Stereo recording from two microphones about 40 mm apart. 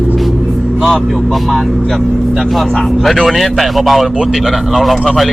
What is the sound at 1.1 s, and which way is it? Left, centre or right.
Speech, centre.